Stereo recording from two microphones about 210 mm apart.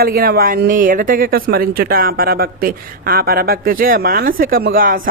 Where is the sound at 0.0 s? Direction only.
45° right (ahead or behind).